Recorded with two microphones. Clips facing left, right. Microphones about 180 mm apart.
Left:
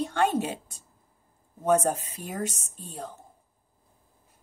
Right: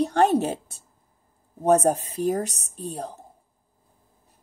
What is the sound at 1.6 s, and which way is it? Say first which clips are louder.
Speech: right 4 dB; 35° right (ahead or behind).